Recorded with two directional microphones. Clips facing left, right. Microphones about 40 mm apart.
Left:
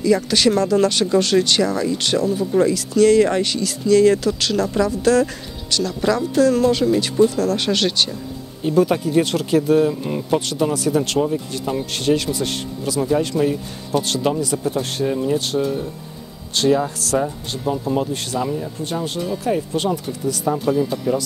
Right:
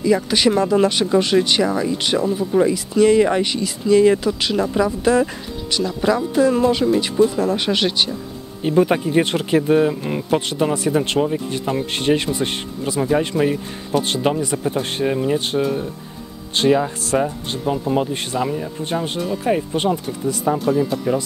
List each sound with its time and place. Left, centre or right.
0.0 s speech: centre
15.6 s speech: centre
16.5 s speech: right
20.5 s speech: centre
21.1 s speech: right